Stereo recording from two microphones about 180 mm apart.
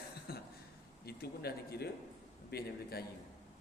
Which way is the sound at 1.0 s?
60° left (ahead or behind).